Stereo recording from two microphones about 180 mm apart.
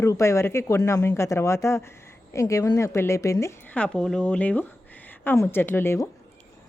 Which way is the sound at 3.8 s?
5° left (ahead or behind).